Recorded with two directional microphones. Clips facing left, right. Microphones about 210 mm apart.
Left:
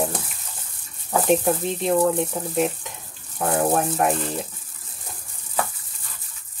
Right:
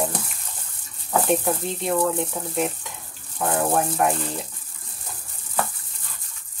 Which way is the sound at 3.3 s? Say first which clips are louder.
Left 1 dB; 25° left (ahead or behind).